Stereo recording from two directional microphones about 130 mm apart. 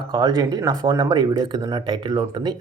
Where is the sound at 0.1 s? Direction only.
30° right (ahead or behind).